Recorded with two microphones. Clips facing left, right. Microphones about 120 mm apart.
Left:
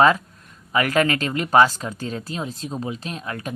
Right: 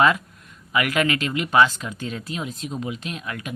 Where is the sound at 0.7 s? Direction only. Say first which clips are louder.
Left 2 dB; 35° left (ahead or behind).